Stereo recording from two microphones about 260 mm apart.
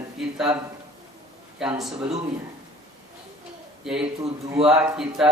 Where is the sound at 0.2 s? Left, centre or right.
Centre.